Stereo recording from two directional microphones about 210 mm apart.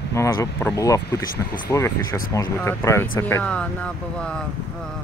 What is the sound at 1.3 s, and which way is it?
Speech, 40° left (ahead or behind).